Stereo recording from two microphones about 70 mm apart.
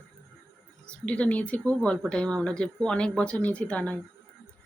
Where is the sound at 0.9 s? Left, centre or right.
Centre.